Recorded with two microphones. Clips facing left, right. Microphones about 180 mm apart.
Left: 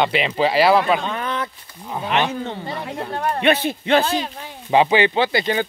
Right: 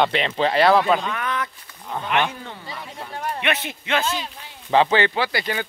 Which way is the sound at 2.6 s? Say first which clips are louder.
Left 8 dB; 65° left (ahead or behind).